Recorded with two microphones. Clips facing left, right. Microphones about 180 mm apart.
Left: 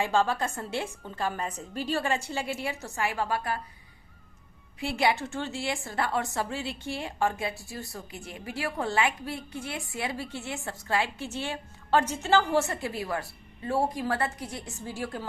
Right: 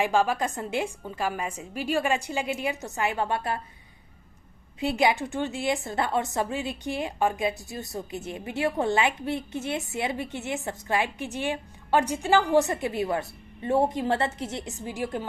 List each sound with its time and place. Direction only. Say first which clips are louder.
0.0 s a woman's voice: right 2 dB; 15° right (ahead or behind)
4.8 s a woman's voice: right 3 dB; 20° right (ahead or behind)